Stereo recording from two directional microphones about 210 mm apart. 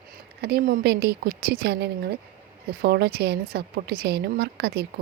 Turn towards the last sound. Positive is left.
turn(degrees=-50)  # may be behind; listen again after turning